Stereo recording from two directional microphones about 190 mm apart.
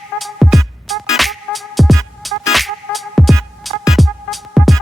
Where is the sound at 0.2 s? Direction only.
Centre (ahead or behind).